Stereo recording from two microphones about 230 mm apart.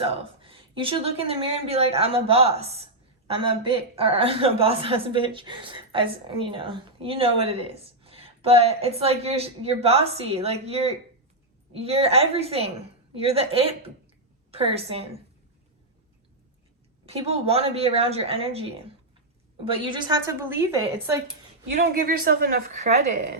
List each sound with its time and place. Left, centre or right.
0.0 s a woman's voice: right
17.1 s a woman's voice: right
22.0 s a woman's voice: right